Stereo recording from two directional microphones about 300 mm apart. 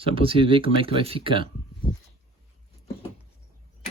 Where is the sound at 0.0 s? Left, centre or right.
Centre.